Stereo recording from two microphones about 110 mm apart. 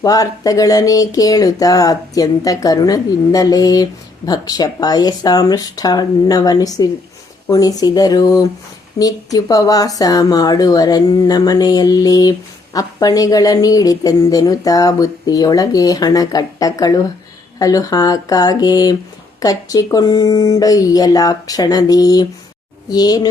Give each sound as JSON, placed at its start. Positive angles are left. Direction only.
{"t": 0.0, "sound": "speech", "side_deg": 35}